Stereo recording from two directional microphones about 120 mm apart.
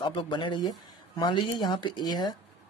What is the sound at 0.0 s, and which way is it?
Speech, 45° left (ahead or behind).